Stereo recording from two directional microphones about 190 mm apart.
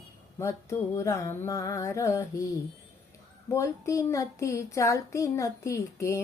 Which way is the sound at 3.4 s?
15° left (ahead or behind).